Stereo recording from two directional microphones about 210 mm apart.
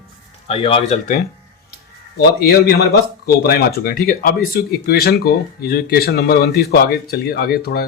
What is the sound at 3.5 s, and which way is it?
Speech, 50° left (ahead or behind).